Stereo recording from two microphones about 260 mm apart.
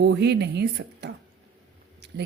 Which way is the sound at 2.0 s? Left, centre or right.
Right.